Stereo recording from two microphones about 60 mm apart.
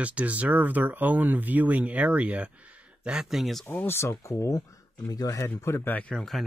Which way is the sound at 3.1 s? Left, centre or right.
Centre.